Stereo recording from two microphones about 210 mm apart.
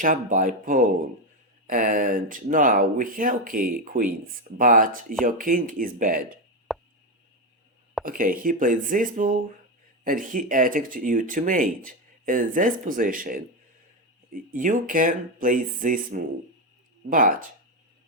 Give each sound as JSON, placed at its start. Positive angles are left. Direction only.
{"t": 0.0, "sound": "speech", "side_deg": -40}
{"t": 6.7, "sound": "a sound", "side_deg": 0}
{"t": 8.0, "sound": "speech", "side_deg": -40}
{"t": 14.5, "sound": "speech", "side_deg": -40}